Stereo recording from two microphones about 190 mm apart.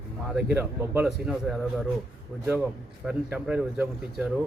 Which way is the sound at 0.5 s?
5° right (ahead or behind).